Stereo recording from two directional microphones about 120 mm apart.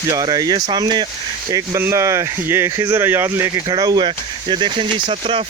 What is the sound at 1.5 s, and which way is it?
Speech, 25° right (ahead or behind).